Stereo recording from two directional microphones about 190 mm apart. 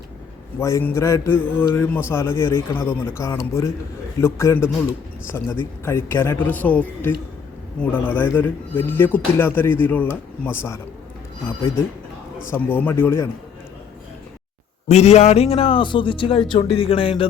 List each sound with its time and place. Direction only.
0.6 s a man's voice: 15° left (ahead or behind)
5.8 s a man's voice: 15° left (ahead or behind)
12.5 s a man's voice: 10° left (ahead or behind)
14.8 s a man's voice: 35° left (ahead or behind)